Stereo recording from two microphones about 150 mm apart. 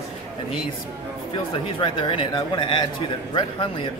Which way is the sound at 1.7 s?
35° left (ahead or behind).